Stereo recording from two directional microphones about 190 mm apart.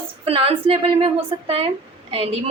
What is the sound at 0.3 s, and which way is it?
Speech, 30° right (ahead or behind).